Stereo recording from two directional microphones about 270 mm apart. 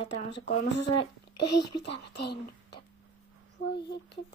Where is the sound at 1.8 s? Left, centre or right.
Left.